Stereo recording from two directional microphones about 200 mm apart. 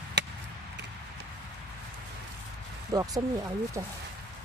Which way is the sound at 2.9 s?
20° right (ahead or behind).